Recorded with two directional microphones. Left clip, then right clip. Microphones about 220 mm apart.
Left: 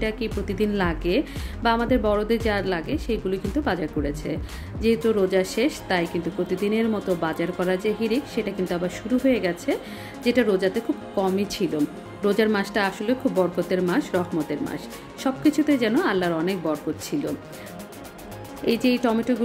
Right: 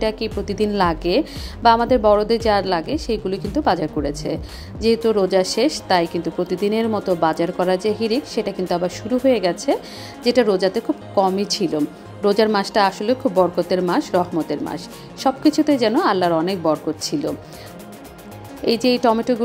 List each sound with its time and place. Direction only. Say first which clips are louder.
0.0 s a woman's voice: right 5 dB; centre (ahead or behind)
18.7 s a woman's voice: right 6 dB; centre (ahead or behind)